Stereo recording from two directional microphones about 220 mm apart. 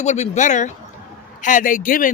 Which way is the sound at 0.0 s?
30° left (ahead or behind).